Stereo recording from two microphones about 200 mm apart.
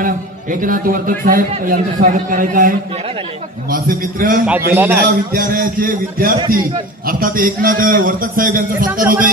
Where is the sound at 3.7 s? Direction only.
45° right (ahead or behind).